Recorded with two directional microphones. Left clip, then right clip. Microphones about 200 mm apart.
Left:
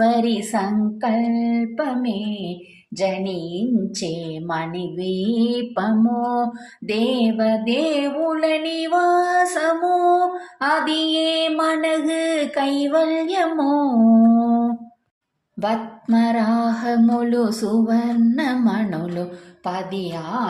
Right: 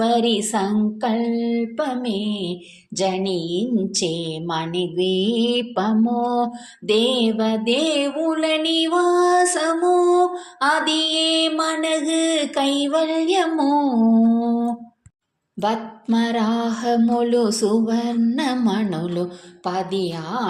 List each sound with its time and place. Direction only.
0.0 s mantra: 20° right (ahead or behind)
4.0 s a woman's voice: centre (ahead or behind)
4.4 s mantra: 25° right (ahead or behind)
19.6 s a woman's voice: 35° right (ahead or behind)